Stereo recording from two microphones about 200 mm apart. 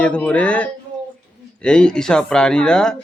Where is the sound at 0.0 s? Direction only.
5° left (ahead or behind).